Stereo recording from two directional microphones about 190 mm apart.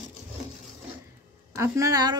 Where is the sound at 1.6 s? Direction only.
15° right (ahead or behind).